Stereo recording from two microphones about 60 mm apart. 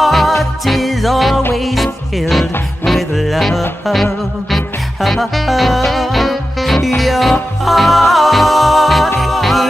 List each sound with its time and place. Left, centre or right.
0.0 s music: centre